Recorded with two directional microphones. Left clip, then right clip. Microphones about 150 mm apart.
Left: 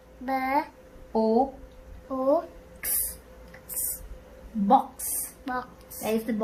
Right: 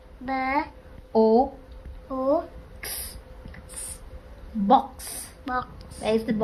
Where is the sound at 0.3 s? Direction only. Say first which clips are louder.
Right 1 dB; 45° left (ahead or behind).